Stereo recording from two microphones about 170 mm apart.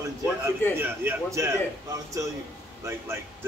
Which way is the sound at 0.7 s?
15° right (ahead or behind).